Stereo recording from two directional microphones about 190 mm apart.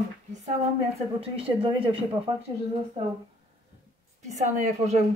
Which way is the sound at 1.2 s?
30° right (ahead or behind).